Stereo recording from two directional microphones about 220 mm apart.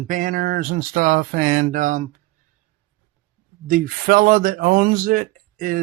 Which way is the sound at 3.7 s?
40° right (ahead or behind).